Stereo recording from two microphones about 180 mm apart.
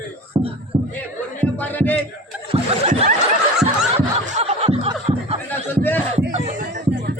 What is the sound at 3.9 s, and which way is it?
Snicker, 40° right (ahead or behind).